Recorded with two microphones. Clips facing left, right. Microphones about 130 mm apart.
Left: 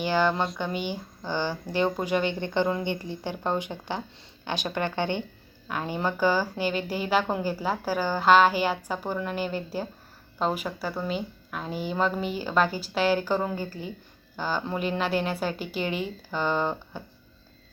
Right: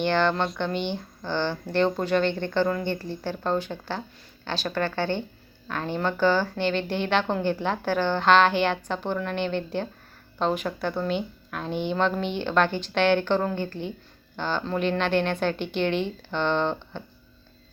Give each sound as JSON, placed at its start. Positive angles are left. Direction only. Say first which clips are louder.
{"t": 0.0, "sound": "speech", "louder": "right 1 dB", "side_deg": 5}